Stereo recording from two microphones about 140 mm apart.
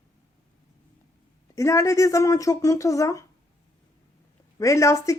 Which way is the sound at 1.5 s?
20° left (ahead or behind).